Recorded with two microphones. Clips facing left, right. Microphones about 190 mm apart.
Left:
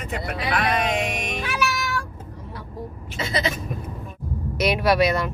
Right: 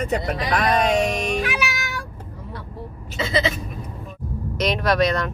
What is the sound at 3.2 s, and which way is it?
Bleat, 25° right (ahead or behind).